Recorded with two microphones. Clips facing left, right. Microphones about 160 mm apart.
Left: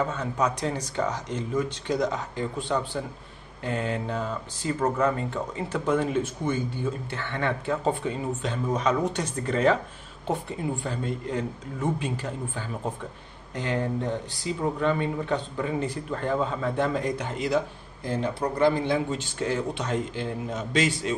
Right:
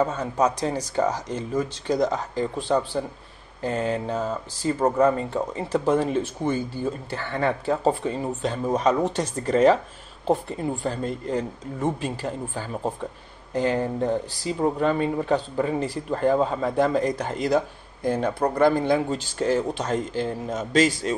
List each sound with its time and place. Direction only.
0.0 s speech: 40° right (ahead or behind)
4.8 s speech: 30° right (ahead or behind)
10.8 s speech: 40° right (ahead or behind)
14.4 s speech: 40° right (ahead or behind)
18.0 s speech: 50° right (ahead or behind)